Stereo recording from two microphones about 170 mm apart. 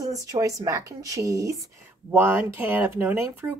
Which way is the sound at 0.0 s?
20° right (ahead or behind).